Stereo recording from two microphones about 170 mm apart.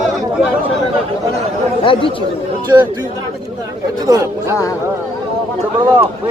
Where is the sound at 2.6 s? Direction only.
25° right (ahead or behind).